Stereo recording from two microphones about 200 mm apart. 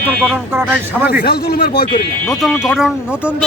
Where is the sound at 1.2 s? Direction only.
50° left (ahead or behind).